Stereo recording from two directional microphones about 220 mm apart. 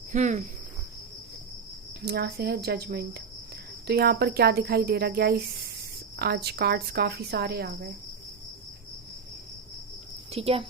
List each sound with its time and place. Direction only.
0.1 s speech: 35° right (ahead or behind)
2.0 s speech: 45° right (ahead or behind)
10.3 s speech: 25° right (ahead or behind)